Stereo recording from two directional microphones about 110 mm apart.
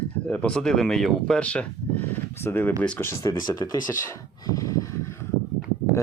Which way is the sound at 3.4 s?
35° left (ahead or behind).